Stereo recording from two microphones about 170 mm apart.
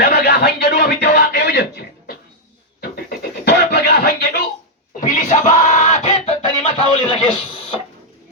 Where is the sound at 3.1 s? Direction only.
75° left (ahead or behind).